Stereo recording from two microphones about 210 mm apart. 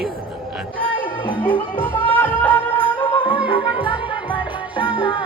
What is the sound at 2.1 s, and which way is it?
Music, 5° left (ahead or behind).